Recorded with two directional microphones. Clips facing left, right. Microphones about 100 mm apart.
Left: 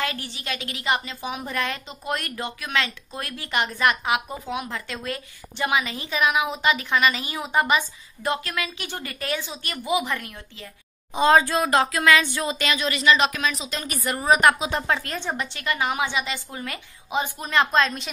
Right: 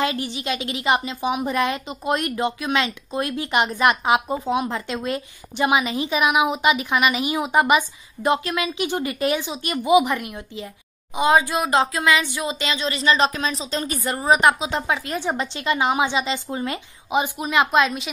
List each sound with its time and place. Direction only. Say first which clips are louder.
0.0 s a woman's voice: right 6 dB; 20° right (ahead or behind)
15.3 s a woman's voice: right 4 dB; 20° right (ahead or behind); by 18.1 s 5° right (ahead or behind)